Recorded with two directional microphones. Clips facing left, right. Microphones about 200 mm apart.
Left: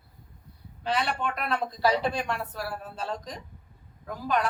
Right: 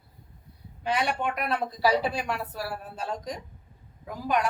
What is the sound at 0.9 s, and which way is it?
A woman's voice, 15° right (ahead or behind).